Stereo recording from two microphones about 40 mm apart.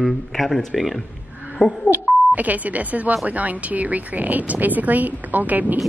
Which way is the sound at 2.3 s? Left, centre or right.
Right.